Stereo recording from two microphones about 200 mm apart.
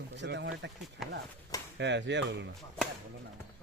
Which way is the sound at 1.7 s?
60° right (ahead or behind).